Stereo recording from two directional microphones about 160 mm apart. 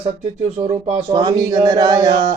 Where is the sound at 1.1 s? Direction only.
25° right (ahead or behind).